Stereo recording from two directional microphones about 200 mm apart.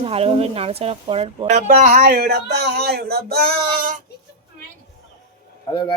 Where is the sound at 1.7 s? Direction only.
40° right (ahead or behind).